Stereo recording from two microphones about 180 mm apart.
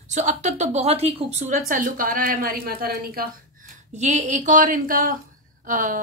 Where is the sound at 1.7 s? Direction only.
50° right (ahead or behind).